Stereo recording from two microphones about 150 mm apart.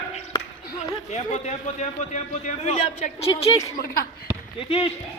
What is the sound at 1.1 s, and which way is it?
A man's voice, 50° left (ahead or behind).